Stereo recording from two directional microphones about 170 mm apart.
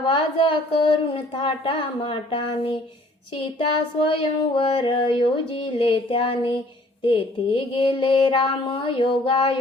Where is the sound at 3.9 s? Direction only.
30° left (ahead or behind).